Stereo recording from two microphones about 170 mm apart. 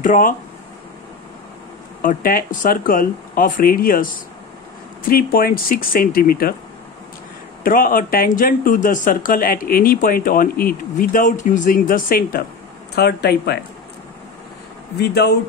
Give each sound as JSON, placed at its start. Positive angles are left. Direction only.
{"t": 0.0, "sound": "speech", "side_deg": 50}
{"t": 2.0, "sound": "speech", "side_deg": 55}
{"t": 7.6, "sound": "speech", "side_deg": 55}
{"t": 12.9, "sound": "speech", "side_deg": 70}
{"t": 15.0, "sound": "speech", "side_deg": 75}